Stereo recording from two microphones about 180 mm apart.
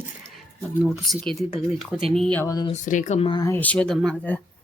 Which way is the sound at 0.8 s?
Centre (ahead or behind).